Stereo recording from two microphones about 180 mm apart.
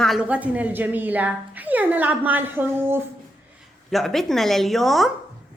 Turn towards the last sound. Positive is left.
turn(degrees=0)  # may be behind; listen again after turning